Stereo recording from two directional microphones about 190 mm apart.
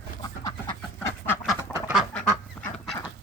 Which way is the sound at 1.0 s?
10° left (ahead or behind).